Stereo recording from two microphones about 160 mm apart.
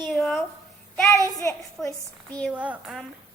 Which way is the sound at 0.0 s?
Centre (ahead or behind).